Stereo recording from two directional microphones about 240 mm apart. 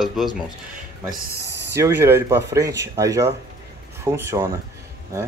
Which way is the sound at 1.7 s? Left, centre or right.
Centre.